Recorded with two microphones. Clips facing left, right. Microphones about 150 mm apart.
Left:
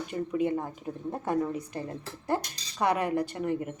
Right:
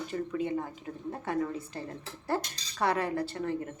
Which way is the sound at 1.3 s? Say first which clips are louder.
Left 3 dB; 15° left (ahead or behind).